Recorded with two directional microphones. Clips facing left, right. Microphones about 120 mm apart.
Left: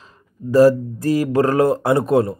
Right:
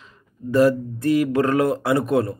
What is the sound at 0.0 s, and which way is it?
Speech, 35° left (ahead or behind).